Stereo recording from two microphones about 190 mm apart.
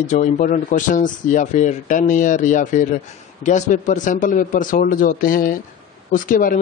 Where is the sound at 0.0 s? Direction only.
40° left (ahead or behind).